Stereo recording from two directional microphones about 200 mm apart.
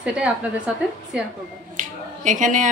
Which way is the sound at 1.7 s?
40° right (ahead or behind).